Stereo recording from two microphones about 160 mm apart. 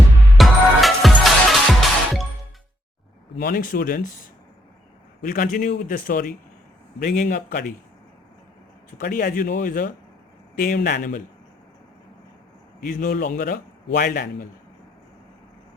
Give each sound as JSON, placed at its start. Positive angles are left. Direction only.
{"t": 0.3, "sound": "music", "side_deg": 0}
{"t": 3.3, "sound": "a man's voice", "side_deg": 65}
{"t": 5.2, "sound": "a man's voice", "side_deg": 60}
{"t": 9.0, "sound": "a man's voice", "side_deg": 60}
{"t": 10.6, "sound": "speech", "side_deg": 80}
{"t": 10.9, "sound": "a man's voice", "side_deg": 60}
{"t": 12.8, "sound": "a man's voice", "side_deg": 60}